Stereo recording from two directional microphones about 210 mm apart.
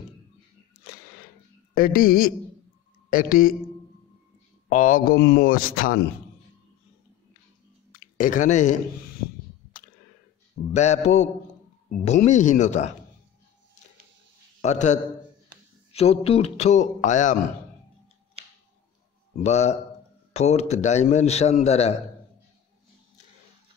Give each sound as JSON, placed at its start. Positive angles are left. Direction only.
{"t": 1.8, "sound": "a man's voice", "side_deg": 45}
{"t": 4.6, "sound": "a man's voice", "side_deg": 40}
{"t": 7.9, "sound": "a sound", "side_deg": 40}
{"t": 10.7, "sound": "a man's voice", "side_deg": 35}
{"t": 14.6, "sound": "a man's voice", "side_deg": 35}
{"t": 19.4, "sound": "a man's voice", "side_deg": 30}